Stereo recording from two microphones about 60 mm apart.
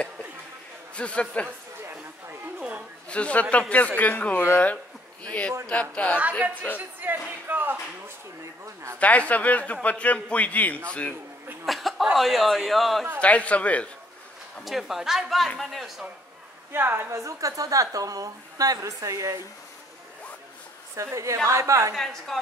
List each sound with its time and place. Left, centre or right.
0.9 s speech: centre
3.1 s speech: left
7.0 s speech: right
9.0 s speech: left
11.6 s speech: centre
13.2 s speech: left
14.6 s a woman's voice: centre
16.7 s a woman's voice: right
17.1 s a woman's voice: right
20.9 s a woman's voice: right
21.9 s a woman's voice: centre